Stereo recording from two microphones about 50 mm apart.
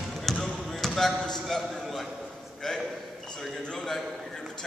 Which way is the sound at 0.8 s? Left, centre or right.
Centre.